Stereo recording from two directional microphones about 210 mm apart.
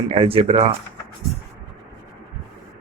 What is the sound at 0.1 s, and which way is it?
Speech, 25° right (ahead or behind).